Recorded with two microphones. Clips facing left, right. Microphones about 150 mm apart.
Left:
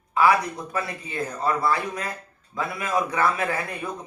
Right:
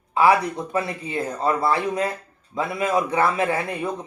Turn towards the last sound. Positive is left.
turn(degrees=-25)  # may be behind; listen again after turning